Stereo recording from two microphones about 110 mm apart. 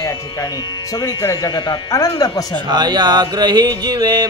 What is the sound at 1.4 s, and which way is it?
Speech, 40° left (ahead or behind).